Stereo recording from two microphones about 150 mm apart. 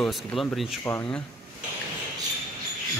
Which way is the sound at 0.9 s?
15° left (ahead or behind).